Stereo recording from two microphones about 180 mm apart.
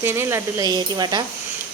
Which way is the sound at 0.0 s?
15° right (ahead or behind).